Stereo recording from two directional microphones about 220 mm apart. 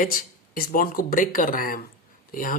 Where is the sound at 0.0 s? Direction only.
40° left (ahead or behind).